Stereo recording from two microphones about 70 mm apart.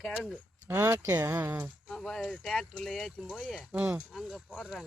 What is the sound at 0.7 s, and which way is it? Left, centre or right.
Speech, right.